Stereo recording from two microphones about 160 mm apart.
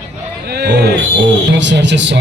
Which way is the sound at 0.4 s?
90° right.